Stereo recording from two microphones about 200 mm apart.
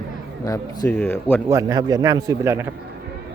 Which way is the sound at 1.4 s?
15° right (ahead or behind).